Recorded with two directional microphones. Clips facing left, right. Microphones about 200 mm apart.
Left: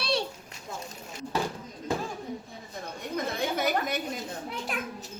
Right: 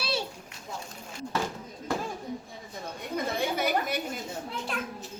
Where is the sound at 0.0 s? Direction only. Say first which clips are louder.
Left 3 dB; 5° right (ahead or behind).